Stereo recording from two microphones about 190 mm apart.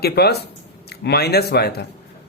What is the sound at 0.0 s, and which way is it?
A man's voice, 55° left (ahead or behind).